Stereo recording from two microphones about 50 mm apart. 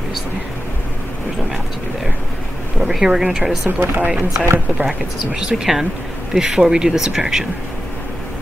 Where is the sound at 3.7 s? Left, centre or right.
Right.